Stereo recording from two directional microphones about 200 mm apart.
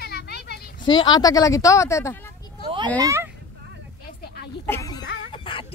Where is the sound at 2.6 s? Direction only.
25° right (ahead or behind).